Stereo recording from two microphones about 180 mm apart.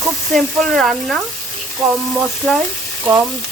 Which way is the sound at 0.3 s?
Centre (ahead or behind).